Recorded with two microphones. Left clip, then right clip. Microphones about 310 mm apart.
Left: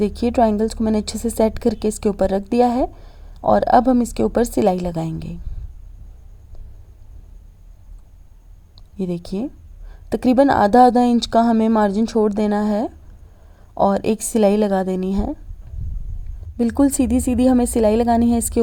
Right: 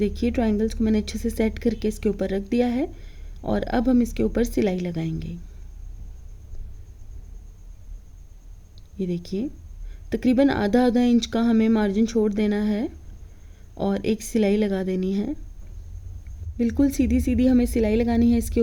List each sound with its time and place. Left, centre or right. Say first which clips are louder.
0.0 s a woman's voice: left 8 dB; centre
9.0 s a woman's voice: left 3 dB; centre
16.6 s a woman's voice: left 5 dB; centre